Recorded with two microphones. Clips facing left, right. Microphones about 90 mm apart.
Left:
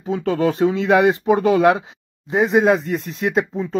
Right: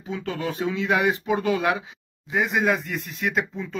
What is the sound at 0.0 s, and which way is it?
Speech, 35° left (ahead or behind).